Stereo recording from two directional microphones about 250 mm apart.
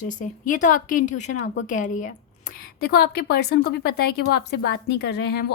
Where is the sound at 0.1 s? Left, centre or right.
Left.